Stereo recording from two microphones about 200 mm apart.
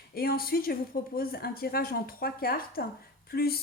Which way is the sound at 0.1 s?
50° left (ahead or behind).